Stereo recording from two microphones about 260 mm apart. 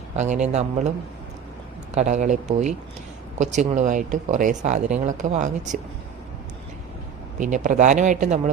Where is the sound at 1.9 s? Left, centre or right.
Right.